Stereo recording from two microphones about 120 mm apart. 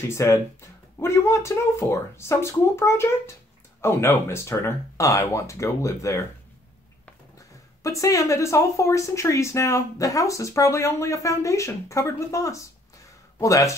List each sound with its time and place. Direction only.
0.1 s speech: 25° left (ahead or behind)
7.3 s speech: 25° left (ahead or behind)